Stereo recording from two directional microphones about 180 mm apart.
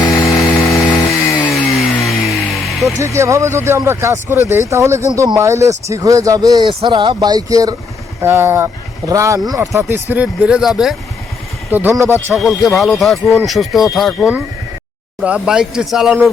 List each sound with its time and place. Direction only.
0.0 s chainsaw: 15° left (ahead or behind)
2.0 s music: centre (ahead or behind)
3.0 s speech: 15° right (ahead or behind)
12.3 s speech: centre (ahead or behind)